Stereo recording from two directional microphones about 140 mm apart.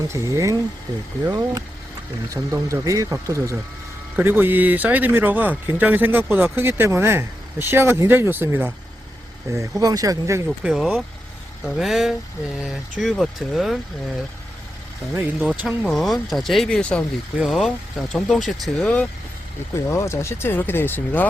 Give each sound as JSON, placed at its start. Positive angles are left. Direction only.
{"t": 0.1, "sound": "speech", "side_deg": -20}
{"t": 2.6, "sound": "speech", "side_deg": -25}
{"t": 10.4, "sound": "speech", "side_deg": -5}
{"t": 15.1, "sound": "speech", "side_deg": -10}
{"t": 15.8, "sound": "speech", "side_deg": 0}
{"t": 17.3, "sound": "speech", "side_deg": 0}
{"t": 19.9, "sound": "speech", "side_deg": 20}